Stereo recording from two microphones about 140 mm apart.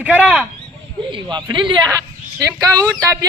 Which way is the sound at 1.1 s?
30° right (ahead or behind).